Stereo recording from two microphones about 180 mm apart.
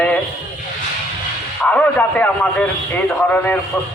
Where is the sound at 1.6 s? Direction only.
5° left (ahead or behind).